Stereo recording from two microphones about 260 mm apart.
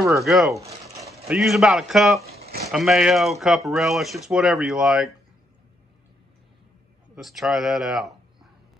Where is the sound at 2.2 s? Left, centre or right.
Right.